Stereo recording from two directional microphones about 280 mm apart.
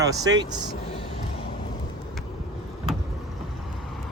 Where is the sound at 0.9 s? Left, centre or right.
Left.